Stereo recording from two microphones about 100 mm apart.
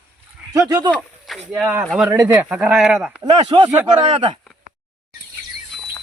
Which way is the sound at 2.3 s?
10° right (ahead or behind).